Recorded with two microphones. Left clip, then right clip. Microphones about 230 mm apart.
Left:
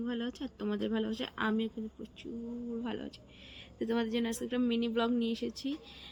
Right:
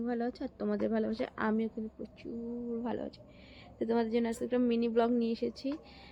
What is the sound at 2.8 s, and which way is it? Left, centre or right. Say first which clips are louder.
Speech: right 3 dB; centre.